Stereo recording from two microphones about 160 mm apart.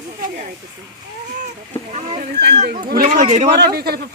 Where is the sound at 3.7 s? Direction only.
75° right (ahead or behind).